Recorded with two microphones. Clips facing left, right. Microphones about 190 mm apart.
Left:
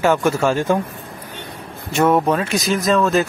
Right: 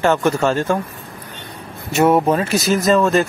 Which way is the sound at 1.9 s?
5° right (ahead or behind).